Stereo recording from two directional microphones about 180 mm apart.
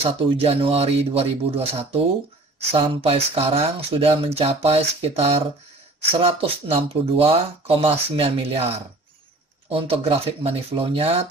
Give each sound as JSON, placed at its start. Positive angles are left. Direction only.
{"t": 0.0, "sound": "speech", "side_deg": -30}
{"t": 9.7, "sound": "speech", "side_deg": -30}